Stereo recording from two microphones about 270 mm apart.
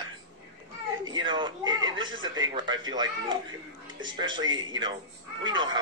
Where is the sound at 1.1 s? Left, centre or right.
Centre.